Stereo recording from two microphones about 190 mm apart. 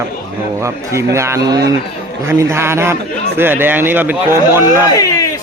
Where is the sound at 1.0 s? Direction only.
15° right (ahead or behind).